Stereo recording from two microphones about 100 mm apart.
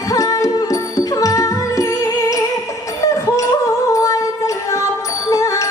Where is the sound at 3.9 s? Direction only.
35° left (ahead or behind).